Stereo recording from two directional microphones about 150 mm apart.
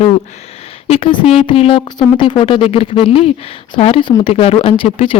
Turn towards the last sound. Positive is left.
turn(degrees=35)  # may be behind; listen again after turning